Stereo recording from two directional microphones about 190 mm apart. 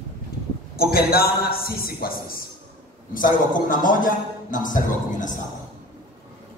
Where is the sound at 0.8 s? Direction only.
50° left (ahead or behind).